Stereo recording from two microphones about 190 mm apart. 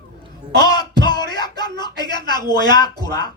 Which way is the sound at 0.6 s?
20° left (ahead or behind).